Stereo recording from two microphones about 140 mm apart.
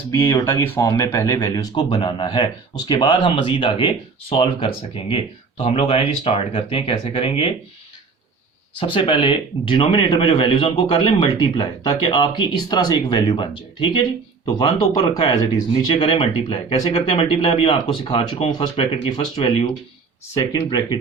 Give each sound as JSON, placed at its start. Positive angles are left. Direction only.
{"t": 0.1, "sound": "speech", "side_deg": 25}
{"t": 1.7, "sound": "speech", "side_deg": 40}
{"t": 8.8, "sound": "speech", "side_deg": 40}
{"t": 15.1, "sound": "speech", "side_deg": 35}